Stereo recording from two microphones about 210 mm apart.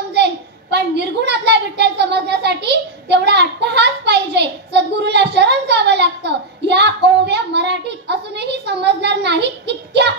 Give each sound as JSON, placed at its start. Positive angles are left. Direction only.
{"t": 0.1, "sound": "a child's voice", "side_deg": -55}